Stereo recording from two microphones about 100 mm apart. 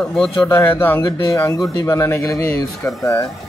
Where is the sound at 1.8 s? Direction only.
30° left (ahead or behind).